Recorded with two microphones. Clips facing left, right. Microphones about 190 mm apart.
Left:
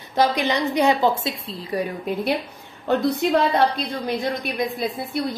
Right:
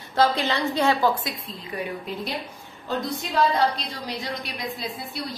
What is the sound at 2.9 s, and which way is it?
A woman's voice, 65° left (ahead or behind).